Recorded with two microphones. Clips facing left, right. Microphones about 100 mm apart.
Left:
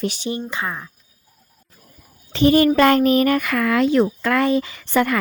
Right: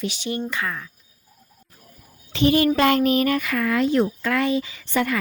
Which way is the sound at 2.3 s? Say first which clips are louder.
Left 4 dB; 40° left (ahead or behind).